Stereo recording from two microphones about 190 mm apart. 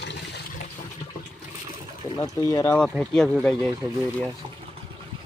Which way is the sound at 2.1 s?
20° left (ahead or behind).